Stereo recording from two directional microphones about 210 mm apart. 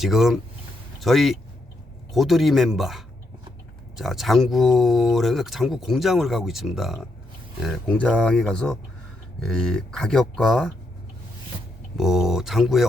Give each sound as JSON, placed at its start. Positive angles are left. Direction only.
{"t": 0.0, "sound": "speech", "side_deg": 0}
{"t": 11.9, "sound": "speech", "side_deg": 0}